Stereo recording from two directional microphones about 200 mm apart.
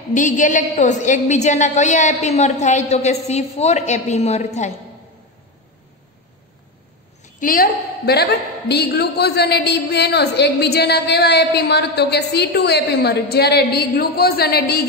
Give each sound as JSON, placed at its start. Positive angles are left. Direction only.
{"t": 0.1, "sound": "a woman's voice", "side_deg": 40}
{"t": 7.3, "sound": "a woman's voice", "side_deg": 45}